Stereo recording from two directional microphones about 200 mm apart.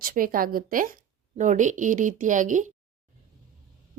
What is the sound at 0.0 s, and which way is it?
A woman's voice, 45° right (ahead or behind).